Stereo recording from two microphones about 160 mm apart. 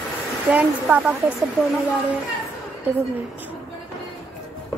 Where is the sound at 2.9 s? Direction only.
10° right (ahead or behind).